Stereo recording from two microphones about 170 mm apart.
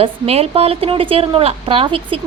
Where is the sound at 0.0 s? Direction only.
35° right (ahead or behind).